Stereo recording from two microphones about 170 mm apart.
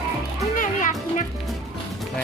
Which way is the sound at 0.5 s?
50° left (ahead or behind).